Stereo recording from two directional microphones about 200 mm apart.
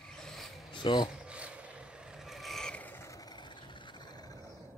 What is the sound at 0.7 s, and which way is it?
Speech, 20° left (ahead or behind).